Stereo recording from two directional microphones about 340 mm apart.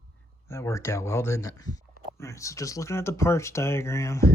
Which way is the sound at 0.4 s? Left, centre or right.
Centre.